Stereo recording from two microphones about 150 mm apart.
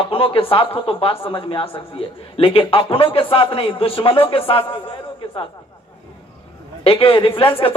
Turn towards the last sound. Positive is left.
turn(degrees=35)  # may be behind; listen again after turning